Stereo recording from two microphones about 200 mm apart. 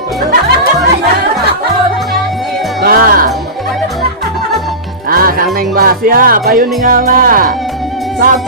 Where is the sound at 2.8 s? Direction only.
45° right (ahead or behind).